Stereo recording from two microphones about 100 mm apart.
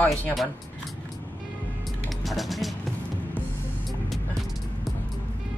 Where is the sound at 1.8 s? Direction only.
Centre (ahead or behind).